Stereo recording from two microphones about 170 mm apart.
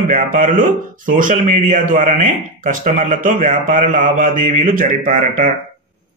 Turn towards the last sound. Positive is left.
turn(degrees=-55)  # may be behind; listen again after turning